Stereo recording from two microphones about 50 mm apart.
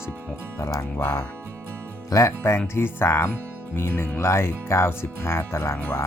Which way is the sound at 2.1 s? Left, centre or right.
Left.